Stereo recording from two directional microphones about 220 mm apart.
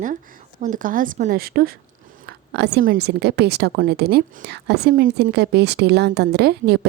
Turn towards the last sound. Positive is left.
turn(degrees=-45)  # may be behind; listen again after turning